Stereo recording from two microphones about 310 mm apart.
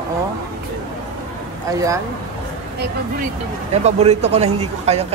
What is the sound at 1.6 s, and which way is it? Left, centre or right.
Speech, centre.